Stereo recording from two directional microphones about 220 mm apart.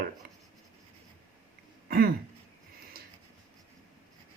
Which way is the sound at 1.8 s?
45° right (ahead or behind).